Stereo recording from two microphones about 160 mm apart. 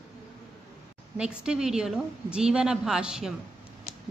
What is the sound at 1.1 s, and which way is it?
Speech, 5° right (ahead or behind).